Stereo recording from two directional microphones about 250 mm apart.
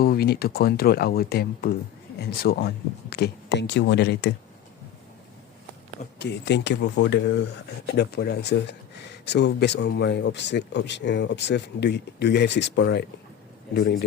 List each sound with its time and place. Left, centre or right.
0.0 s speech: left
6.1 s speech: left